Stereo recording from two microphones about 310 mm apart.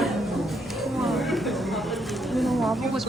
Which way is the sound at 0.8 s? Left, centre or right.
Centre.